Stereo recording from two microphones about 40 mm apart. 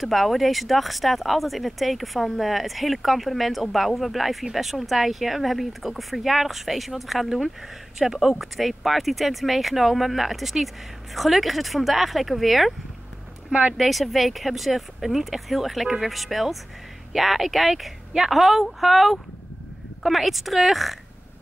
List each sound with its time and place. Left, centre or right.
0.0 s speech: centre
13.5 s speech: right
13.7 s speech: centre